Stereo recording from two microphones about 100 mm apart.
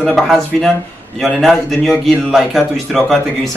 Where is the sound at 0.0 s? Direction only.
Centre (ahead or behind).